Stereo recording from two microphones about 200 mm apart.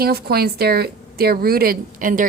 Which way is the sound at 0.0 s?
50° right (ahead or behind).